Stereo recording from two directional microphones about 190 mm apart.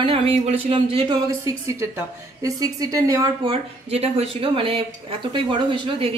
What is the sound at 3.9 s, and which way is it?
Speech, 30° right (ahead or behind).